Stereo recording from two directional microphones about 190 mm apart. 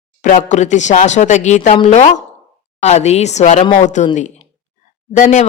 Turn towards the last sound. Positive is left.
turn(degrees=40)  # may be behind; listen again after turning